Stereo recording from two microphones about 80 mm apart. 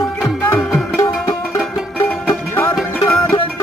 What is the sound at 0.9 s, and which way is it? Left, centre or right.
Music, left.